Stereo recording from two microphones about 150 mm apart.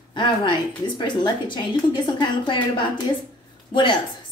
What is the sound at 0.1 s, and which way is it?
A woman's voice, 30° left (ahead or behind).